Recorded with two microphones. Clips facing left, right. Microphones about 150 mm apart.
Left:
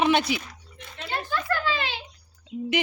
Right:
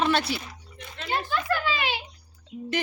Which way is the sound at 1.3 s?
15° right (ahead or behind).